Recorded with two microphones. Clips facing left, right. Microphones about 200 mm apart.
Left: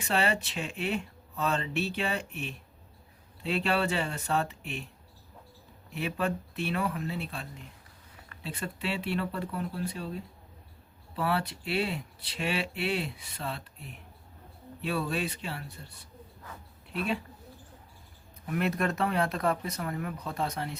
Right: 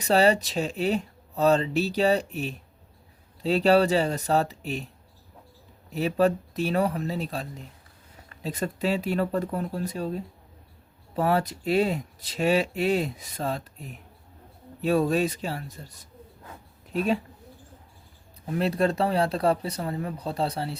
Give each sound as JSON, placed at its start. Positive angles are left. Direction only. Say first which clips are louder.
{"t": 0.0, "sound": "speech", "louder": "right 8 dB", "side_deg": -40}
{"t": 5.9, "sound": "speech", "louder": "right 9 dB", "side_deg": -40}
{"t": 16.5, "sound": "a sound", "louder": "right 7 dB", "side_deg": -40}
{"t": 18.4, "sound": "speech", "louder": "right 5 dB", "side_deg": -30}